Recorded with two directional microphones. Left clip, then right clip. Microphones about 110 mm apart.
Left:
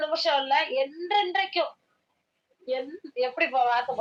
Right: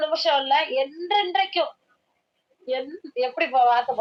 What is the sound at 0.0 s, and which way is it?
A woman's voice, 45° right (ahead or behind).